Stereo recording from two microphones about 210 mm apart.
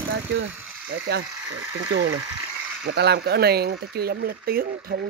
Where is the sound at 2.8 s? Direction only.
50° right (ahead or behind).